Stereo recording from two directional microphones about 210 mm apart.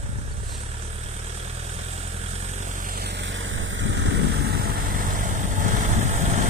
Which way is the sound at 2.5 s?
35° right (ahead or behind).